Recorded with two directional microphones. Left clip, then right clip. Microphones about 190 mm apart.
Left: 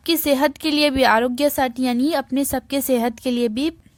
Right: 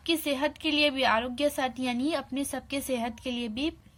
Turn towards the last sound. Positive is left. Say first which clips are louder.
# left 11 dB
turn(degrees=55)  # may be behind; listen again after turning